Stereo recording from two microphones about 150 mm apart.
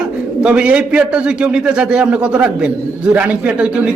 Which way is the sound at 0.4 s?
10° right (ahead or behind).